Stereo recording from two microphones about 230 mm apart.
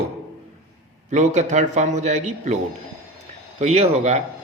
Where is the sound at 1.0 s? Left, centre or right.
Right.